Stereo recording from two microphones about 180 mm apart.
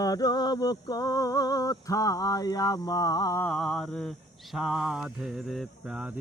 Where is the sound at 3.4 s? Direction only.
Centre (ahead or behind).